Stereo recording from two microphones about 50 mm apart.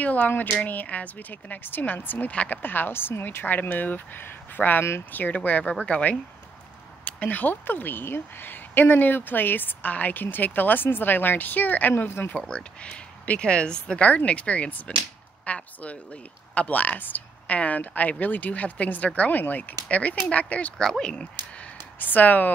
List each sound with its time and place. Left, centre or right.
0.0 s a woman's voice: left
2.6 s a woman's voice: left
12.4 s a woman's voice: centre
21.9 s speech: left